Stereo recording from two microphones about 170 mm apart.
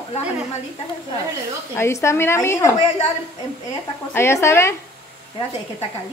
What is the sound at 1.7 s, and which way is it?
Speech, 15° left (ahead or behind).